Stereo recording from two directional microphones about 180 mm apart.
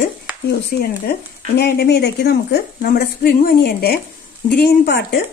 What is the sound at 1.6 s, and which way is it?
A woman's voice, 65° left (ahead or behind).